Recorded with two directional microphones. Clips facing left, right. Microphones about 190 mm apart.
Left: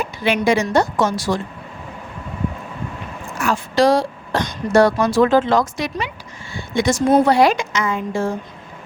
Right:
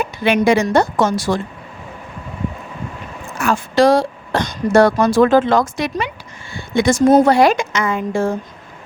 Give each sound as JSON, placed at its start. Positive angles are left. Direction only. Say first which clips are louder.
{"t": 0.0, "sound": "speech", "louder": "right 3 dB", "side_deg": -55}
{"t": 3.4, "sound": "speech", "louder": "right 2 dB", "side_deg": -50}